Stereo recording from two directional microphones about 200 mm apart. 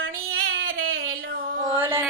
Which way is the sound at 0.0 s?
80° right.